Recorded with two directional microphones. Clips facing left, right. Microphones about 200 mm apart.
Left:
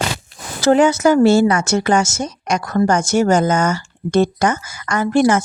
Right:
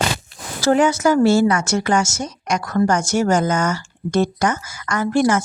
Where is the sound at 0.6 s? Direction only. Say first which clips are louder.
Left 3 dB; 25° left (ahead or behind).